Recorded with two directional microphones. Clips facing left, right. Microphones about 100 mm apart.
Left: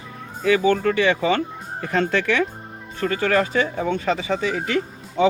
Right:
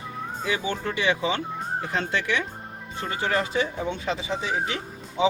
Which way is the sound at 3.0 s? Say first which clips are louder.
Left 6 dB; 65° left (ahead or behind).